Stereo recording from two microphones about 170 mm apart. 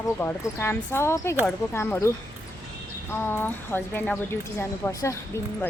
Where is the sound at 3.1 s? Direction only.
10° left (ahead or behind).